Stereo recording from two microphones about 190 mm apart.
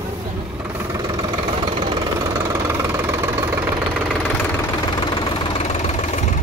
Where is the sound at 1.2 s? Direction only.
25° right (ahead or behind).